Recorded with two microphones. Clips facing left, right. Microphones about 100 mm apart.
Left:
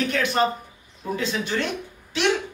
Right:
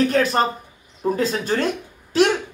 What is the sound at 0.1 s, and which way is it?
Speech, 40° right (ahead or behind).